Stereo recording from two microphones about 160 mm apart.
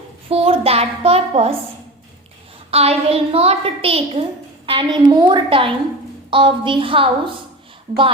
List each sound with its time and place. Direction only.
0.3 s a woman's voice: 40° right (ahead or behind)
2.6 s a woman's voice: 40° right (ahead or behind)